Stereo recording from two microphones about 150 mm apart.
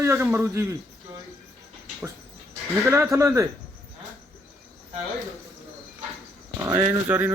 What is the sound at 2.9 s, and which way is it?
Speech, 20° right (ahead or behind).